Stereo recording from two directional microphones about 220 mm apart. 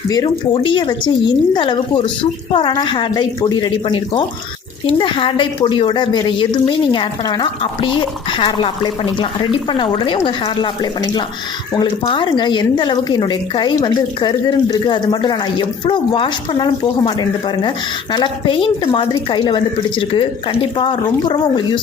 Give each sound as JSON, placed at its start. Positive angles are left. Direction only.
{"t": 0.1, "sound": "speech", "side_deg": 20}
{"t": 11.8, "sound": "speech", "side_deg": 20}